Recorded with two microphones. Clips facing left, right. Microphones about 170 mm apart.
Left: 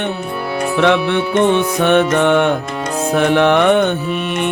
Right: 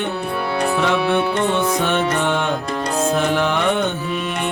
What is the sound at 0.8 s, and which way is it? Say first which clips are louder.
Music: left 6 dB; 70° left (ahead or behind).